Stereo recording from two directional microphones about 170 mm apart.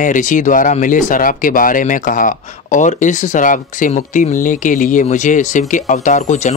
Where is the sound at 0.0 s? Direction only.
50° left (ahead or behind).